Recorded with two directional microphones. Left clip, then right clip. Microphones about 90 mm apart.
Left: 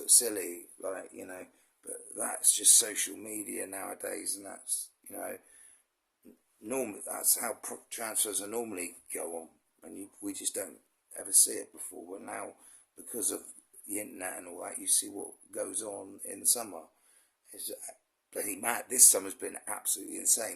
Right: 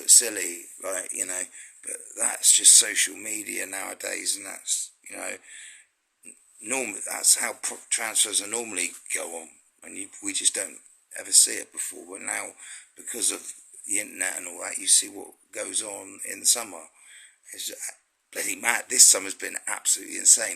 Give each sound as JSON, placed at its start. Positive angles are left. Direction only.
{"t": 0.0, "sound": "speech", "side_deg": 45}
{"t": 2.2, "sound": "speech", "side_deg": 45}
{"t": 5.0, "sound": "speech", "side_deg": 25}
{"t": 6.7, "sound": "speech", "side_deg": 35}
{"t": 18.3, "sound": "speech", "side_deg": 35}
{"t": 19.8, "sound": "speech", "side_deg": 50}